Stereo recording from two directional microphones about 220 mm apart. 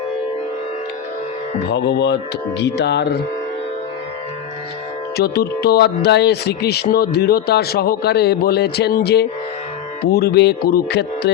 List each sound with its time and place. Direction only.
1.7 s speech: 50° left (ahead or behind)
5.1 s speech: 45° left (ahead or behind)